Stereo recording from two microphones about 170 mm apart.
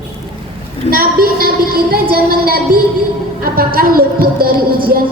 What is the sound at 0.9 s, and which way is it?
A woman's voice, 60° right (ahead or behind).